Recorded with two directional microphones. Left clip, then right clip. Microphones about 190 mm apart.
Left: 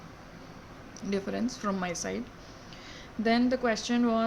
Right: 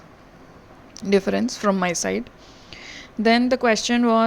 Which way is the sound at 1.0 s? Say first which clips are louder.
Right 12 dB; 50° right (ahead or behind).